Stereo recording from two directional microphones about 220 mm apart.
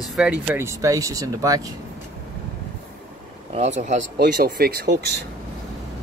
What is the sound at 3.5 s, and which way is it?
Speech, 30° right (ahead or behind).